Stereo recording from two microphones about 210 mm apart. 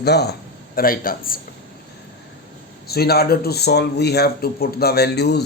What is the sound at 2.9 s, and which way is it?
Speech, 50° left (ahead or behind).